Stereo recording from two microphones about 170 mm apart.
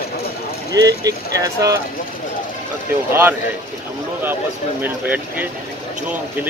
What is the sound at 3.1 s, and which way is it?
Speech, 15° right (ahead or behind).